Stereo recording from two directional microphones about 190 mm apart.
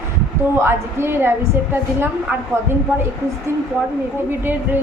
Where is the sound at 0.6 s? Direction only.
10° right (ahead or behind).